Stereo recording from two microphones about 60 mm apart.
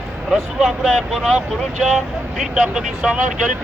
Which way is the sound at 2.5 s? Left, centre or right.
Centre.